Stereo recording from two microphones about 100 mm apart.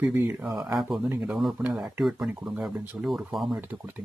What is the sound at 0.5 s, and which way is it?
Speech, 5° right (ahead or behind).